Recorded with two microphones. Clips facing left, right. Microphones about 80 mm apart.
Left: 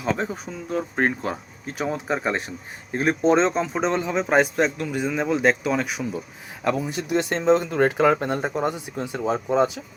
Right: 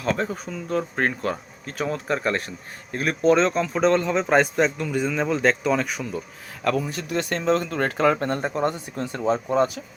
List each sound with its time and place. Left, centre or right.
0.1 s speech: centre